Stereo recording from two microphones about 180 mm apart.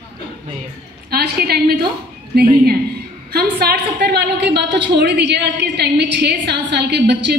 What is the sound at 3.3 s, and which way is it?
A woman's voice, 60° right (ahead or behind).